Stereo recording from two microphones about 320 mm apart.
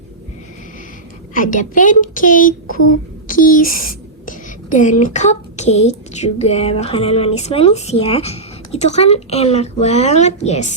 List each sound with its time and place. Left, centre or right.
1.3 s speech: left